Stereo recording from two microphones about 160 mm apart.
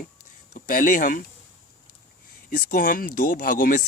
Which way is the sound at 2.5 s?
55° left (ahead or behind).